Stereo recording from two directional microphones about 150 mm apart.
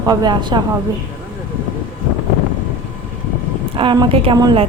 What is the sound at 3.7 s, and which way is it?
Speech, 35° right (ahead or behind).